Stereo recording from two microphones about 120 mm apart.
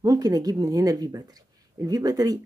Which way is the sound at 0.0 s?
30° right (ahead or behind).